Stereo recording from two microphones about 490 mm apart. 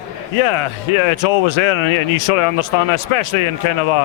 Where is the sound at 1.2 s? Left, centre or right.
Left.